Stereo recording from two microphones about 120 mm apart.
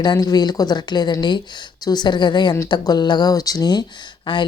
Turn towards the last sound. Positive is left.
turn(degrees=40)  # may be behind; listen again after turning